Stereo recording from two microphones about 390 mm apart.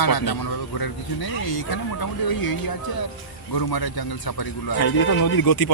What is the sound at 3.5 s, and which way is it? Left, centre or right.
Speech, left.